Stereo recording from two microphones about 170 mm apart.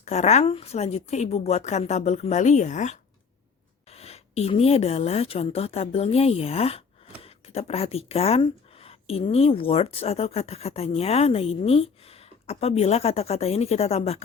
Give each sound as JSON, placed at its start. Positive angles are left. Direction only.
{"t": 0.0, "sound": "speech", "side_deg": 40}